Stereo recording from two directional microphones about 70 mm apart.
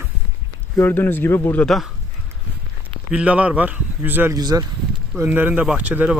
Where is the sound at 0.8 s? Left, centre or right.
Left.